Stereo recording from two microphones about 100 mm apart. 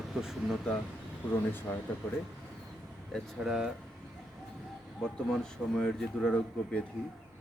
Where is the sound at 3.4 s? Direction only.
5° right (ahead or behind).